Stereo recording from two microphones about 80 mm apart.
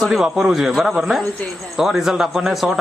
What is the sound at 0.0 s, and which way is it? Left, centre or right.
Speech, centre.